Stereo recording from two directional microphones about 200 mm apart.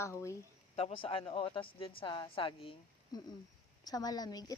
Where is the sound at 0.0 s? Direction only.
15° left (ahead or behind).